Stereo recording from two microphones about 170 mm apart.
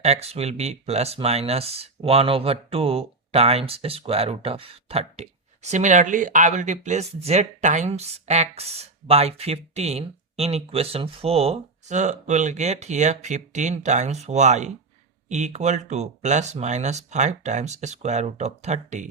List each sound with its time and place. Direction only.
0.0 s speech: 40° right (ahead or behind)